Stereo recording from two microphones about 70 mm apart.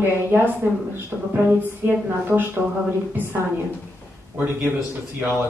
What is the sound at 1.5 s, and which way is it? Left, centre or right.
Speech, right.